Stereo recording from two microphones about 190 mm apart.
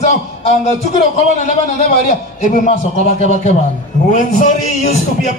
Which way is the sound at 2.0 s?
40° left (ahead or behind).